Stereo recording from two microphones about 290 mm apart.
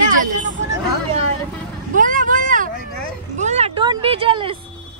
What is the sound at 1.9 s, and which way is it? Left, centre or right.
Speech, right.